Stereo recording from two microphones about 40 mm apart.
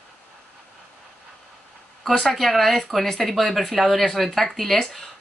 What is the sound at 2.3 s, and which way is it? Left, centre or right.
Speech, centre.